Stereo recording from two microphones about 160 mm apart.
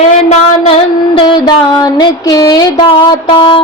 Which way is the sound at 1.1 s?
35° left (ahead or behind).